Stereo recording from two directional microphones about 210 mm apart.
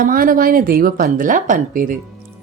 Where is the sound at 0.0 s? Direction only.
40° right (ahead or behind).